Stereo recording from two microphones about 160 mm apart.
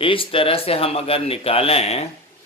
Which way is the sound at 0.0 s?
35° left (ahead or behind).